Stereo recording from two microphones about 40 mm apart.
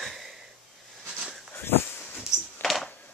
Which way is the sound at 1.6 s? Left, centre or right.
Left.